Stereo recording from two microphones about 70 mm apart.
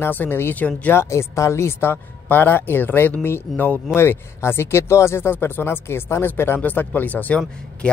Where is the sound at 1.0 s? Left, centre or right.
Left.